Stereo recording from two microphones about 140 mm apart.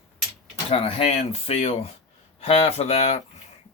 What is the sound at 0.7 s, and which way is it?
Speech, 45° left (ahead or behind).